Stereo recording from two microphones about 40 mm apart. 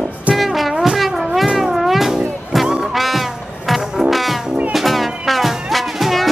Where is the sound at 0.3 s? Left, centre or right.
Centre.